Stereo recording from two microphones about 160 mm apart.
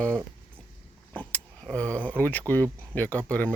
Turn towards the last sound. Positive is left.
turn(degrees=10)  # may be behind; listen again after turning